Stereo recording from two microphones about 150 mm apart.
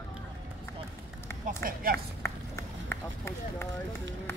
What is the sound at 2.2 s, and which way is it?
Run, 15° left (ahead or behind).